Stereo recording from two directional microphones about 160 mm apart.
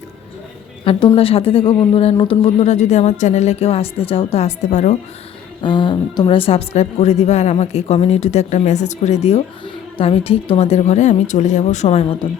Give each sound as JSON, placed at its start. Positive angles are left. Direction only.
{"t": 0.9, "sound": "a woman's voice", "side_deg": 35}
{"t": 5.6, "sound": "speech", "side_deg": 30}